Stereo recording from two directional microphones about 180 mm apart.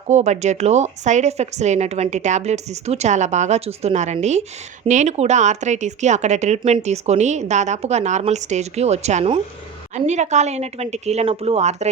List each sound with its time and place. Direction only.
0.1 s speech: 40° right (ahead or behind)